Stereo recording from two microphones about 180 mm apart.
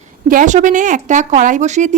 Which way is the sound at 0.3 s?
45° right (ahead or behind).